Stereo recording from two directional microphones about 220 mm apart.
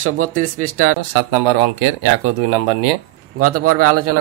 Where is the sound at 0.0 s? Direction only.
70° right (ahead or behind).